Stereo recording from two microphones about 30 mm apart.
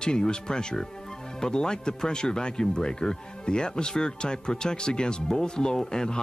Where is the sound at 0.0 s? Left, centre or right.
Left.